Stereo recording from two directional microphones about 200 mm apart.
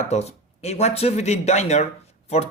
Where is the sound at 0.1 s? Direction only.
35° left (ahead or behind).